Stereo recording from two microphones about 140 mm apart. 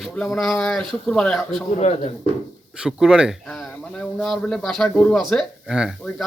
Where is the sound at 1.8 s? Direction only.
50° left (ahead or behind).